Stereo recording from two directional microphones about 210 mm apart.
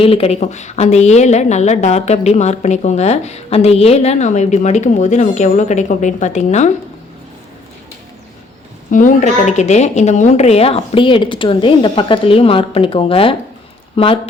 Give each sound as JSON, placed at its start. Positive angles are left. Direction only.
{"t": 0.0, "sound": "a woman's voice", "side_deg": 30}
{"t": 8.9, "sound": "a woman's voice", "side_deg": 40}